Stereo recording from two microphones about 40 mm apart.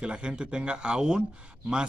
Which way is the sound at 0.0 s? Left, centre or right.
Right.